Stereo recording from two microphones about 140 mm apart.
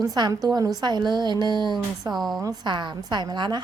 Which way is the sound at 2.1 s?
Centre (ahead or behind).